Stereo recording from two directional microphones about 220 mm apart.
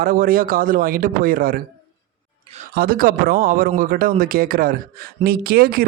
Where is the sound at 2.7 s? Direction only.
45° right (ahead or behind).